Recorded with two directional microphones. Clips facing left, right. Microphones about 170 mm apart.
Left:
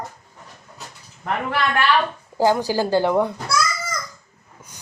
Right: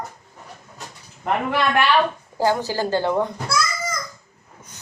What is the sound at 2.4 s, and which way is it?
Speech, 15° left (ahead or behind).